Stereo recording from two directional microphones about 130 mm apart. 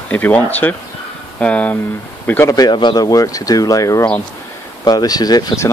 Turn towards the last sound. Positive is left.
turn(degrees=30)  # may be behind; listen again after turning